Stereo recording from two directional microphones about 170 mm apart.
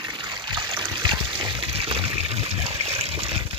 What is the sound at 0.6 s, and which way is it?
Trickle, 25° right (ahead or behind).